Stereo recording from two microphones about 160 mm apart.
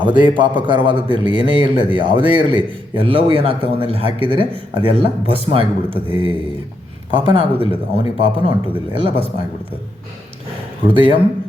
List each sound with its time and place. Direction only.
0.0 s a man's voice: 30° right (ahead or behind)
7.3 s a man's voice: 35° right (ahead or behind)
10.8 s a man's voice: 30° right (ahead or behind)